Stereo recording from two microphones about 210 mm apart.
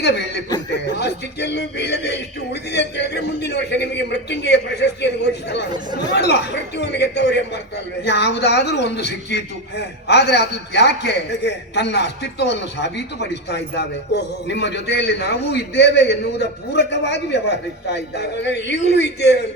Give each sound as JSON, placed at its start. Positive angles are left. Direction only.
{"t": 0.0, "sound": "a man's voice", "side_deg": 55}